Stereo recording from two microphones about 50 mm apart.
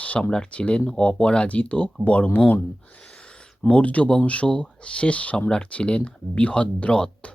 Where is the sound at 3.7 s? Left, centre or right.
Left.